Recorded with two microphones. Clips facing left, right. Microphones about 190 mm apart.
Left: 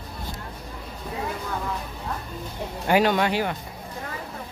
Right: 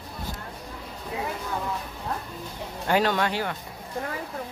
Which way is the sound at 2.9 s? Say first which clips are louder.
Left 3 dB; 15° left (ahead or behind).